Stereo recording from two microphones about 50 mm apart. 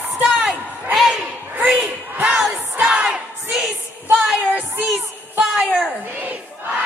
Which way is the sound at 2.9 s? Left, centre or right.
Centre.